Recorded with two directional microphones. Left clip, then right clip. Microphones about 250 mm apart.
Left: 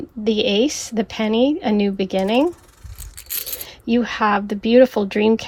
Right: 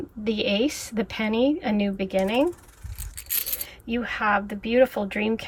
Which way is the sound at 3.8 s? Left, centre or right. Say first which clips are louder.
Left 6 dB; centre.